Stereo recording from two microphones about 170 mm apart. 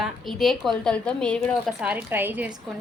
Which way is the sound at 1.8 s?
10° right (ahead or behind).